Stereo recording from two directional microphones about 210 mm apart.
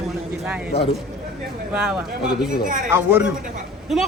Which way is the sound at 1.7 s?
5° right (ahead or behind).